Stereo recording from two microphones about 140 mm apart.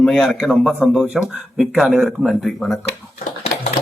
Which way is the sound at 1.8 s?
Centre (ahead or behind).